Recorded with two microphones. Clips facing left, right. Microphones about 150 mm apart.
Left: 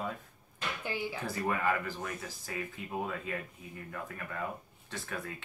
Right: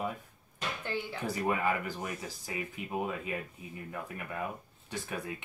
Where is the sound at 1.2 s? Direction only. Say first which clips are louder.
Right 4 dB; 15° right (ahead or behind).